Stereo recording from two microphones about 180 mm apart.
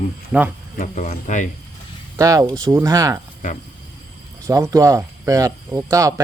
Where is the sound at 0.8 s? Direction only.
45° left (ahead or behind).